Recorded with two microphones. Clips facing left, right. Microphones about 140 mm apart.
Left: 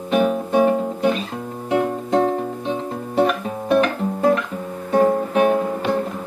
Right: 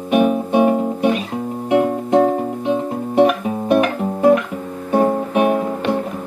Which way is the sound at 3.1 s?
10° right (ahead or behind).